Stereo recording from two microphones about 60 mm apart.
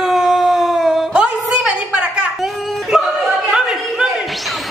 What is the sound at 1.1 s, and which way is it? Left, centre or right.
Music, centre.